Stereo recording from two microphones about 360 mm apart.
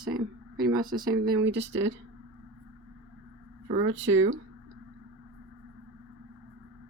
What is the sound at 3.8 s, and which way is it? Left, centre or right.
Speech, right.